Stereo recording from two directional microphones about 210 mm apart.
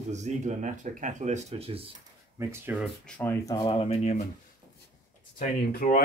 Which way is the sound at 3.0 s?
10° left (ahead or behind).